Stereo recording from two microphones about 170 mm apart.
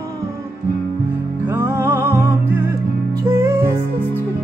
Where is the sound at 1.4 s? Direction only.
15° right (ahead or behind).